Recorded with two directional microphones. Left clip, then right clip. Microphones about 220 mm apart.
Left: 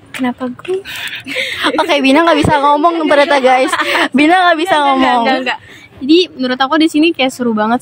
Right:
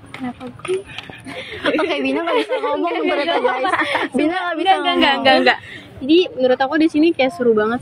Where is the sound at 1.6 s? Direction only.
45° left (ahead or behind).